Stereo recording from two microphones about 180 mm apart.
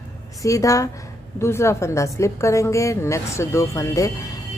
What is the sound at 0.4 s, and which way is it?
A woman's voice, 20° left (ahead or behind).